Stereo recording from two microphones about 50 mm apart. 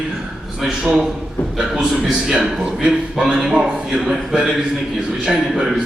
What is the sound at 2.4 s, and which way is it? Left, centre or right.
A man's voice, centre.